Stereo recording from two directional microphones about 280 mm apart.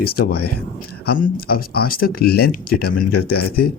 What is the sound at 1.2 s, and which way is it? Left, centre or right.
Speech, left.